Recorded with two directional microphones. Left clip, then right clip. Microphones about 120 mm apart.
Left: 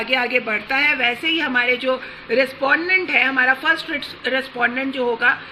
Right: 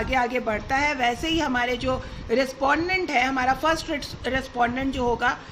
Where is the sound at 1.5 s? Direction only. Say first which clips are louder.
Left 6 dB; 35° right (ahead or behind).